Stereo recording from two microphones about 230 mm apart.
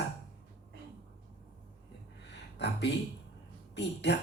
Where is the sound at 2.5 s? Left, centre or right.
Left.